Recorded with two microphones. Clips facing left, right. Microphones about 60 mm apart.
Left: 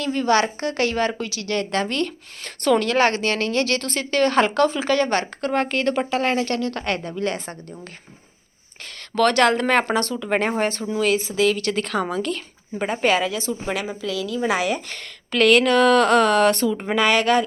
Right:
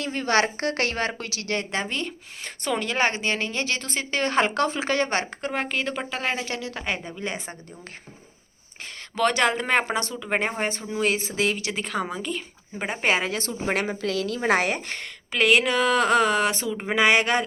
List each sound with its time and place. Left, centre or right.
0.0 s a woman's voice: right
1.7 s a woman's voice: centre
5.5 s a woman's voice: centre
9.1 s a woman's voice: centre
10.9 s a woman's voice: right
11.6 s a woman's voice: centre
13.1 s a woman's voice: right
13.3 s a woman's voice: right
14.7 s a woman's voice: right
15.3 s a woman's voice: centre